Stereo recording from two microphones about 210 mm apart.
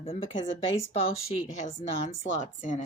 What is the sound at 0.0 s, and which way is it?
Speech, 30° left (ahead or behind).